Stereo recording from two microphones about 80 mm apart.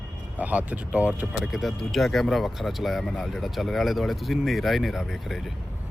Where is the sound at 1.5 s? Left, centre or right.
Centre.